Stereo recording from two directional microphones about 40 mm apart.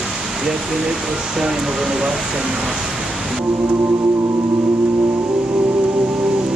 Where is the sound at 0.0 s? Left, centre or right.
Centre.